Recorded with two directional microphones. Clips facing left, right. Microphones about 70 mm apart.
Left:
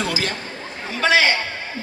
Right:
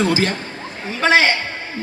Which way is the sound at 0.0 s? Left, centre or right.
Right.